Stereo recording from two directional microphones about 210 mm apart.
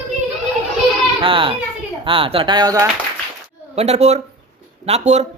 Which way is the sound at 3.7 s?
30° right (ahead or behind).